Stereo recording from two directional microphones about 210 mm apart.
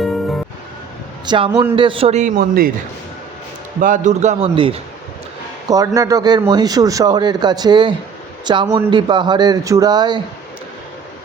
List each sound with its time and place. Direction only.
0.0 s music: centre (ahead or behind)
1.2 s a man's voice: 20° right (ahead or behind); by 2.7 s 45° right (ahead or behind)
3.8 s a man's voice: 40° right (ahead or behind); by 10.2 s 20° right (ahead or behind)